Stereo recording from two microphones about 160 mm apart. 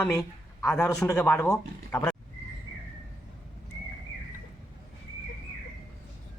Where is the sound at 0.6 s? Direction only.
5° left (ahead or behind); by 2.0 s 20° left (ahead or behind).